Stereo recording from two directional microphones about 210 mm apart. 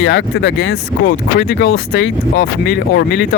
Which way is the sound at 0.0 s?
55° left (ahead or behind).